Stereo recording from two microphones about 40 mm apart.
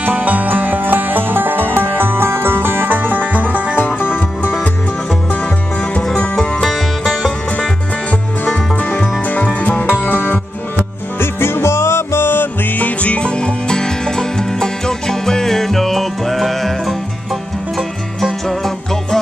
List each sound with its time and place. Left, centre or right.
0.0 s music: right
3.7 s music: left
8.5 s music: left
11.1 s music: left
12.6 s music: left
13.2 s music: left; by 16.9 s centre
18.2 s music: centre